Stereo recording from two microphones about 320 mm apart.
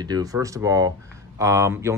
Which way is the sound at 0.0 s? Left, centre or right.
Centre.